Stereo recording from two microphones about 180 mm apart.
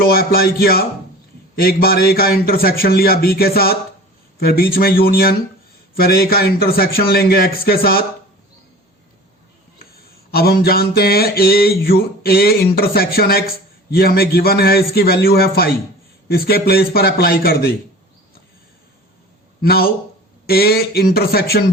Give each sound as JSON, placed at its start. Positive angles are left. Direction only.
{"t": 0.0, "sound": "mantra", "side_deg": 55}
{"t": 9.9, "sound": "mantra", "side_deg": 60}
{"t": 19.6, "sound": "mantra", "side_deg": 60}